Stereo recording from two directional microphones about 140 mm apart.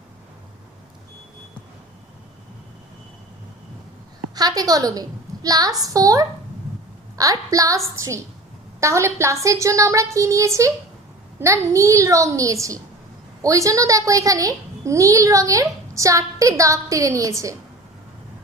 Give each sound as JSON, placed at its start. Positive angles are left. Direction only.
{"t": 4.4, "sound": "a child's voice", "side_deg": -25}
{"t": 8.8, "sound": "a child's voice", "side_deg": -20}